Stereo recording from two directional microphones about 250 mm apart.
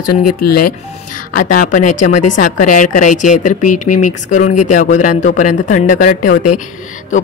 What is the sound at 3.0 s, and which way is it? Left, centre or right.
Speech, left.